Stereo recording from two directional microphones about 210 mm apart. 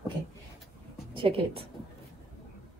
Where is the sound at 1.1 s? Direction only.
25° right (ahead or behind).